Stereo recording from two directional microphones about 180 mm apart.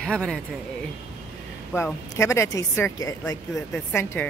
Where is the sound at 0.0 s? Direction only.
5° left (ahead or behind).